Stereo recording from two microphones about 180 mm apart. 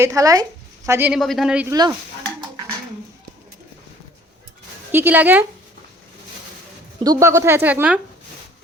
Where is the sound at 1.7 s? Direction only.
20° right (ahead or behind).